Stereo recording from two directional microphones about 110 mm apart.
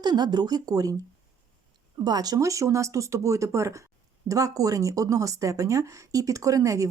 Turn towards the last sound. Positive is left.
turn(degrees=-30)  # may be behind; listen again after turning